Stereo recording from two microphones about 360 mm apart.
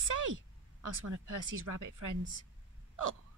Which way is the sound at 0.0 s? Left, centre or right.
Right.